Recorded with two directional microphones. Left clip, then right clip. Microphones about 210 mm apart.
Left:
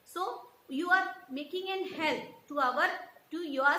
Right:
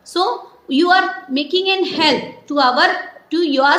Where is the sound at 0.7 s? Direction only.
50° right (ahead or behind).